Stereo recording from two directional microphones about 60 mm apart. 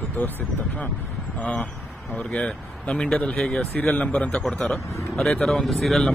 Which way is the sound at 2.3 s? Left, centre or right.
Centre.